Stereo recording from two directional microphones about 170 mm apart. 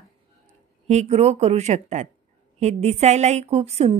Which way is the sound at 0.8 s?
40° right (ahead or behind).